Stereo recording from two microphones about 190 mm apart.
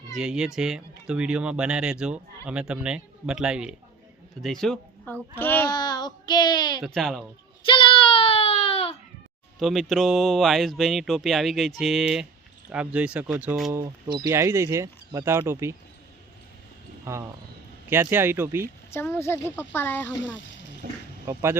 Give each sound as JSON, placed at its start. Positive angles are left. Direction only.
{"t": 0.1, "sound": "speech", "side_deg": -5}
{"t": 5.7, "sound": "child singing", "side_deg": 20}
{"t": 6.2, "sound": "speech", "side_deg": 20}
{"t": 6.8, "sound": "speech", "side_deg": 0}
{"t": 7.7, "sound": "child singing", "side_deg": 30}
{"t": 9.6, "sound": "speech", "side_deg": 0}
{"t": 14.2, "sound": "speech", "side_deg": -20}
{"t": 17.1, "sound": "speech", "side_deg": -15}
{"t": 18.9, "sound": "speech", "side_deg": 10}
{"t": 20.8, "sound": "speech", "side_deg": -45}
{"t": 21.2, "sound": "speech", "side_deg": -15}